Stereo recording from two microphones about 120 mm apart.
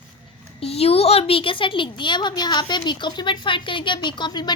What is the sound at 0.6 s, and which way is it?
A woman's voice, 55° left (ahead or behind).